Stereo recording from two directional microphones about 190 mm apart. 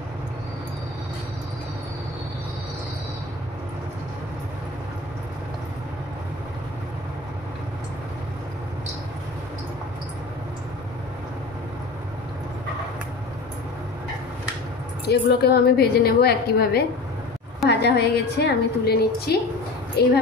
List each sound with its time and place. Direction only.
15.0 s a woman's voice: 55° left (ahead or behind)